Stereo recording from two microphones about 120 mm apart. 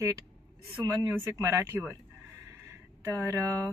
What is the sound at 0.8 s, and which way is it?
Speech, 25° right (ahead or behind).